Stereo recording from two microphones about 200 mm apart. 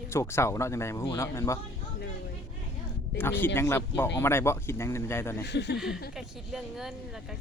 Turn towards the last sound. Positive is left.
turn(degrees=0)  # may be behind; listen again after turning